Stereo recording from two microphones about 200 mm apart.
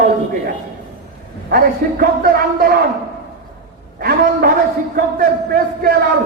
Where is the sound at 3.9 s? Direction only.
50° right (ahead or behind).